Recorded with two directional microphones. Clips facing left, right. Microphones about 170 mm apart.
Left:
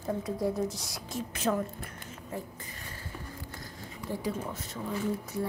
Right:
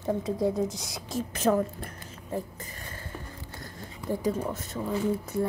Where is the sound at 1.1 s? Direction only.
40° right (ahead or behind).